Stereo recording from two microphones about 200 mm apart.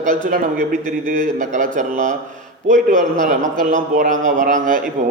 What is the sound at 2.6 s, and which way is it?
A man's voice, 40° right (ahead or behind).